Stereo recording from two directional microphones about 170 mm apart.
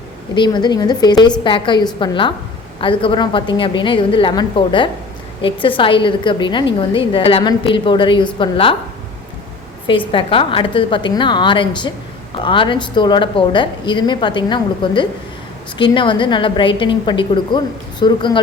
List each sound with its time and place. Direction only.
0.3 s a woman's voice: 25° left (ahead or behind)
10.1 s a woman's voice: 30° left (ahead or behind)